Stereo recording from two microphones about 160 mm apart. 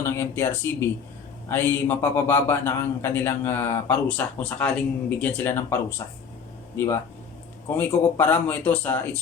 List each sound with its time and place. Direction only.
0.0 s a man's voice: 15° left (ahead or behind)